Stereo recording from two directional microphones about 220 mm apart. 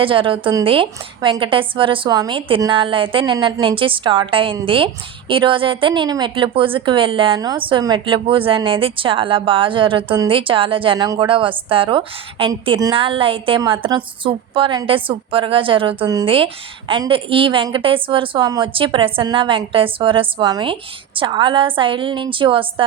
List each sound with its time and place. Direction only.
0.0 s a woman's voice: 25° right (ahead or behind)